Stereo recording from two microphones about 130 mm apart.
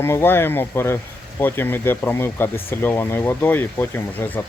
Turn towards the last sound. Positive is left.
turn(degrees=15)  # may be behind; listen again after turning